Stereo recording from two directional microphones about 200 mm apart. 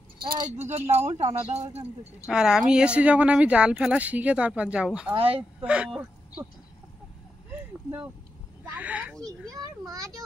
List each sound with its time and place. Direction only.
0.2 s speech: 25° right (ahead or behind)
0.5 s speech: 35° right (ahead or behind)
2.2 s speech: 5° right (ahead or behind)
5.1 s a child's voice: 30° right (ahead or behind)
5.6 s speech: 5° right (ahead or behind)
8.7 s speech: 5° right (ahead or behind)
9.2 s a child's voice: 20° right (ahead or behind)